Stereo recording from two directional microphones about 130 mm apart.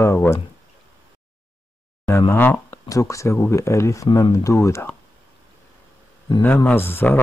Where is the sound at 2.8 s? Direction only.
25° left (ahead or behind).